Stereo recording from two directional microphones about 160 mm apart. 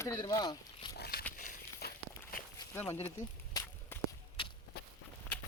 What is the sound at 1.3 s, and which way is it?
Walk, 65° left (ahead or behind).